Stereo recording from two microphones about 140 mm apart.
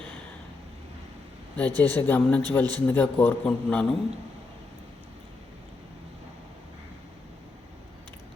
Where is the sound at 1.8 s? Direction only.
15° left (ahead or behind).